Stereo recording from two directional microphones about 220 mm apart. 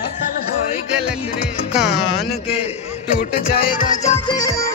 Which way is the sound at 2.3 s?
25° left (ahead or behind).